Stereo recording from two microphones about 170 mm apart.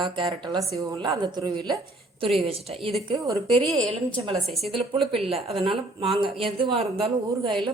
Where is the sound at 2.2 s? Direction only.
35° right (ahead or behind).